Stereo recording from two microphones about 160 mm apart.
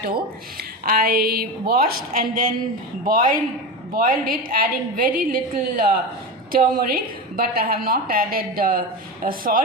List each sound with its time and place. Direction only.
0.5 s a woman's voice: 70° right (ahead or behind)